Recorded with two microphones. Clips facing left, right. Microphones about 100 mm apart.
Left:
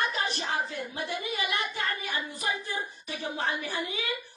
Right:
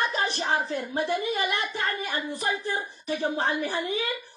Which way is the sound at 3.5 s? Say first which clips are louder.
Right 5 dB; 35° right (ahead or behind).